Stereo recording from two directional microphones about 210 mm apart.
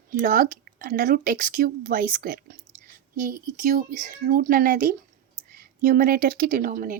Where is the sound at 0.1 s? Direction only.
40° right (ahead or behind).